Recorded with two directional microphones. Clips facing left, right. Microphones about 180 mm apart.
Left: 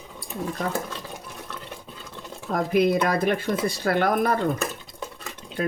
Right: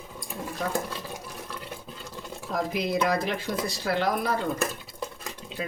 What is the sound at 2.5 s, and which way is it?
Speech, 55° left (ahead or behind).